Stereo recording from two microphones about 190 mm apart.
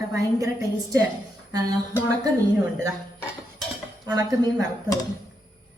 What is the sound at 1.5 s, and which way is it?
Speech, 20° right (ahead or behind).